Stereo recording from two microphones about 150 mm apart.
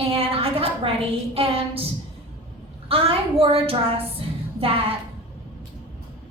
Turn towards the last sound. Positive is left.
turn(degrees=-40)  # may be behind; listen again after turning